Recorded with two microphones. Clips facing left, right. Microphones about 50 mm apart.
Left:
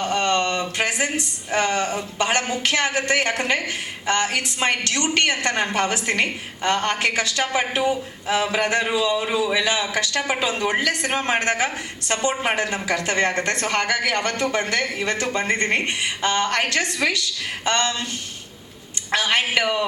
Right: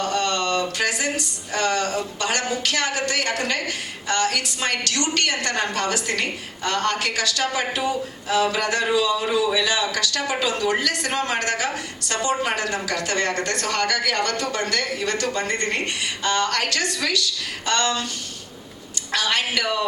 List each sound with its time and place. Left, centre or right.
0.0 s speech: left
19.1 s speech: left